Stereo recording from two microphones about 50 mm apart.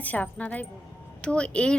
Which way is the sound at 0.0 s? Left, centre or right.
Left.